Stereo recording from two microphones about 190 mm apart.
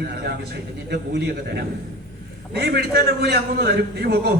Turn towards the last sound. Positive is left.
turn(degrees=-55)  # may be behind; listen again after turning